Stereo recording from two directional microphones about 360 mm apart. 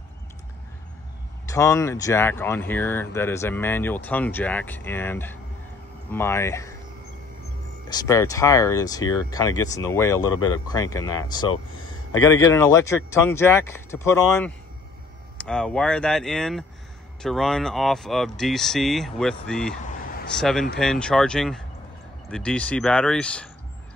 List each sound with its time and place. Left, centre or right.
1.5 s speech: centre
7.9 s a man's voice: centre